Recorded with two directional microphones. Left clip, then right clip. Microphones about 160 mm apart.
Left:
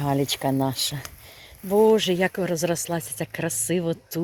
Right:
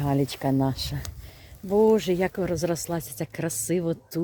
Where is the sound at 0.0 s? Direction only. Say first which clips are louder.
Left 2 dB; 5° right (ahead or behind).